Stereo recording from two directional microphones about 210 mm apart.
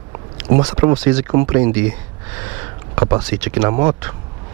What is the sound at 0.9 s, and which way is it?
Speech, 10° right (ahead or behind).